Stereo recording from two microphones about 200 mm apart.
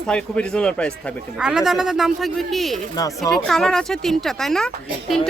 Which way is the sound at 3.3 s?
Centre (ahead or behind).